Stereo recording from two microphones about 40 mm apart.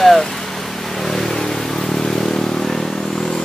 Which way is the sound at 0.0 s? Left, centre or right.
Centre.